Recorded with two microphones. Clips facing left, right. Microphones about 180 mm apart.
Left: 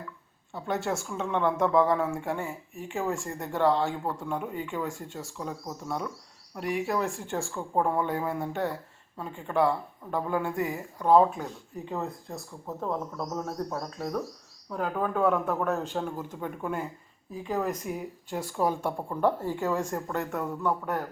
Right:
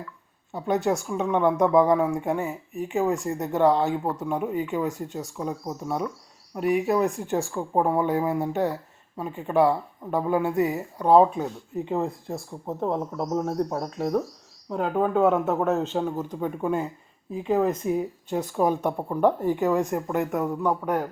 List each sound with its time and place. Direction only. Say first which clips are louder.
0.5 s a woman's voice: right 6 dB; 20° right (ahead or behind)